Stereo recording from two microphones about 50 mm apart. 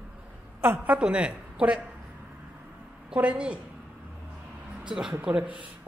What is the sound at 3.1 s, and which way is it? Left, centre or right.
Speech, right.